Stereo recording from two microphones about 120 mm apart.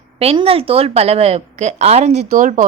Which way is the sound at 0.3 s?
50° right (ahead or behind).